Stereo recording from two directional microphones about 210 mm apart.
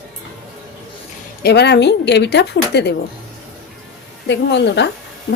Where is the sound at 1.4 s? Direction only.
50° left (ahead or behind).